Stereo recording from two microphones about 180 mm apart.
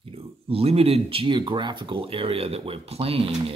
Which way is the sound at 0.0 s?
30° right (ahead or behind).